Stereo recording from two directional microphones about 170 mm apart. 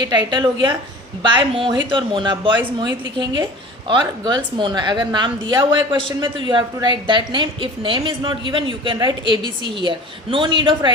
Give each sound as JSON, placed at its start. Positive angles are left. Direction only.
{"t": 0.0, "sound": "a woman's voice", "side_deg": -25}